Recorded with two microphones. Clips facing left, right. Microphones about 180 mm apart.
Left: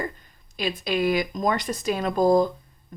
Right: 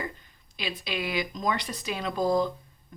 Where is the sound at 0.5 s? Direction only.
45° left (ahead or behind).